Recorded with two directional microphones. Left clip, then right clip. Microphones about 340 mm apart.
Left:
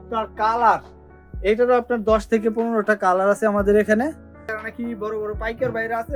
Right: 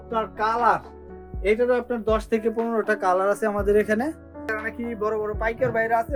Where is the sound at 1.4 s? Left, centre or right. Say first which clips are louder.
Left 3 dB; centre.